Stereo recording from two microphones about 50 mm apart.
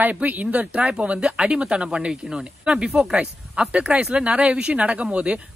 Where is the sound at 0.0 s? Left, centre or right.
Right.